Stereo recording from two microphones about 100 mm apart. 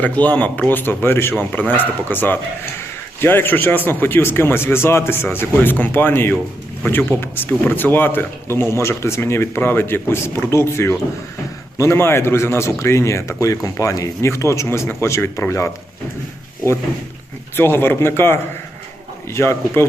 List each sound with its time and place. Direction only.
0.0 s a man's voice: 15° left (ahead or behind)
17.6 s speech: 20° left (ahead or behind)